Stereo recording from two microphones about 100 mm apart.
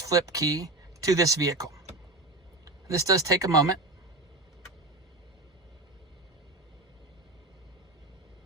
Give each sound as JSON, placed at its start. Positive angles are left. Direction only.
{"t": 0.0, "sound": "speech", "side_deg": -35}